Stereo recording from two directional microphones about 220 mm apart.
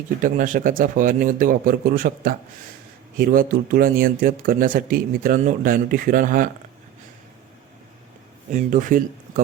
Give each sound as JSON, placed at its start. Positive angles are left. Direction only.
{"t": 0.2, "sound": "speech", "side_deg": -35}
{"t": 8.5, "sound": "speech", "side_deg": -35}